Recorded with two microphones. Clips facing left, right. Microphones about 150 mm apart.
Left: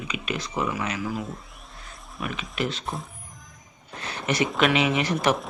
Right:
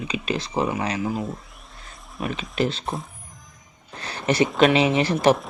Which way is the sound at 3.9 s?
35° right (ahead or behind).